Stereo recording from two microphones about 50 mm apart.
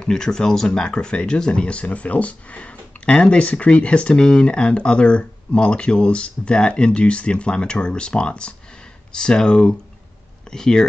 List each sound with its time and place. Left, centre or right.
0.0 s speech: centre